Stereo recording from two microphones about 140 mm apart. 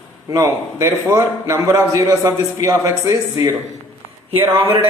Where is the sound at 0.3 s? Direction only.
20° right (ahead or behind).